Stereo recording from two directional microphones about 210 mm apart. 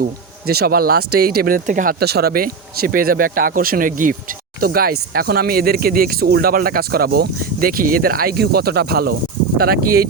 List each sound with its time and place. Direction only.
0.0 s speech: 45° right (ahead or behind)